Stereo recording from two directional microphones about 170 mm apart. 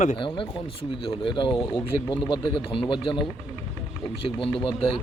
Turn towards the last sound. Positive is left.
turn(degrees=30)  # may be behind; listen again after turning